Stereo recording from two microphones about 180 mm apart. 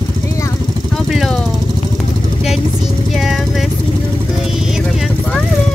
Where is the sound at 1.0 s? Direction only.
Centre (ahead or behind).